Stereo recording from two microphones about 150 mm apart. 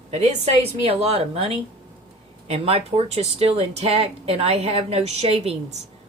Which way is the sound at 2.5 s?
40° right (ahead or behind).